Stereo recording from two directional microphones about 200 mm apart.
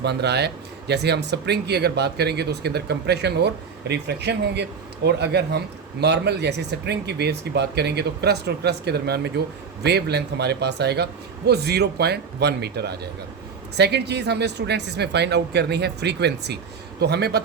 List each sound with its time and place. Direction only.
0.0 s speech: 55° right (ahead or behind)